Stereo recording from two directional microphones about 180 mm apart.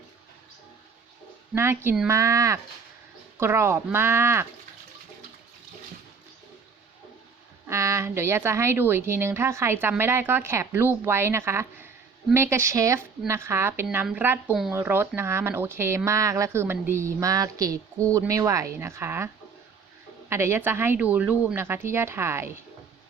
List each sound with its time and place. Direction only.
1.5 s speech: 15° right (ahead or behind)
7.7 s speech: 15° right (ahead or behind)
20.3 s speech: 15° right (ahead or behind)